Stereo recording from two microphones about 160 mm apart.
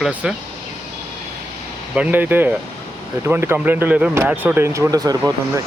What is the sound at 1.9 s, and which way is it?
Speech, 10° right (ahead or behind).